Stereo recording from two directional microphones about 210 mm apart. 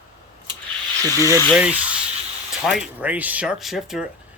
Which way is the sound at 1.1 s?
15° right (ahead or behind).